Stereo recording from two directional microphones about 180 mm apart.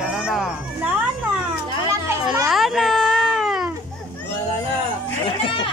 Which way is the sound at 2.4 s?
Centre (ahead or behind).